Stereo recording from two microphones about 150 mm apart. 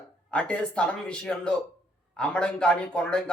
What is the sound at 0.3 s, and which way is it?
A man's voice, 10° left (ahead or behind).